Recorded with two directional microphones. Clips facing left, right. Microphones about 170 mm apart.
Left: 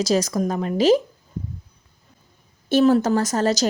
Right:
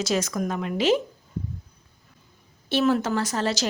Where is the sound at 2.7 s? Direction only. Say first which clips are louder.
Left 6 dB; 40° left (ahead or behind).